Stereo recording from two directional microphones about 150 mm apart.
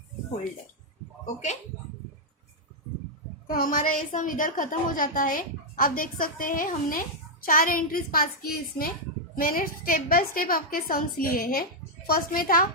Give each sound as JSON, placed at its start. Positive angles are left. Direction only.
{"t": 3.5, "sound": "a woman's voice", "side_deg": 65}